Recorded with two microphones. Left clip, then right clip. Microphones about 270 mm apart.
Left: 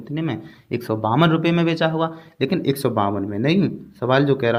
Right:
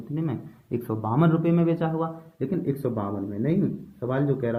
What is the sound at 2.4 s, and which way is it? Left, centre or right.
Speech, left.